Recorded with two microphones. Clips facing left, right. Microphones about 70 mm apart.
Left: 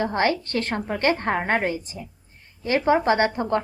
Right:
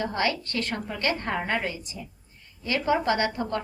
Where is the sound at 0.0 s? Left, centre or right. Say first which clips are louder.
Left 5 dB; left.